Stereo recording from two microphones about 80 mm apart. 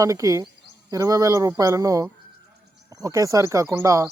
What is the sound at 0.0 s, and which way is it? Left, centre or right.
Speech, right.